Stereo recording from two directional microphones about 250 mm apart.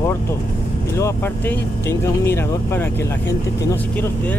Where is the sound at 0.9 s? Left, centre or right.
Centre.